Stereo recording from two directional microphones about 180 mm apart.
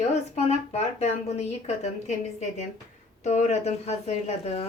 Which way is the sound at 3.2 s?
40° left (ahead or behind).